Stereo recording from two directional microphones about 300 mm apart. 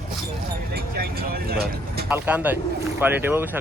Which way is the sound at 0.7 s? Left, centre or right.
Right.